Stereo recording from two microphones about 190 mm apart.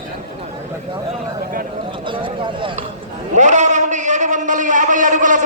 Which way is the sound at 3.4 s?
40° right (ahead or behind).